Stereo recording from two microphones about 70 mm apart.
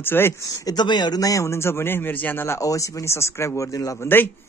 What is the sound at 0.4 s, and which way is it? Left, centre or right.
A man's voice, left.